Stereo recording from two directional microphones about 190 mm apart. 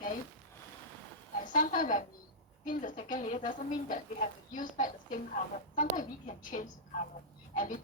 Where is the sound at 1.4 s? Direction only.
45° left (ahead or behind).